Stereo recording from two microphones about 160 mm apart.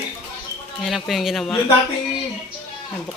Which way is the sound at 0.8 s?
Centre (ahead or behind).